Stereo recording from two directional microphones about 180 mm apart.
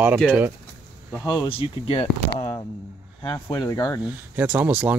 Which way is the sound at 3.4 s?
20° left (ahead or behind).